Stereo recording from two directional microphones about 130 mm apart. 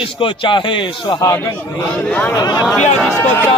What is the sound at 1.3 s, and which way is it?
Battle cry, 20° left (ahead or behind).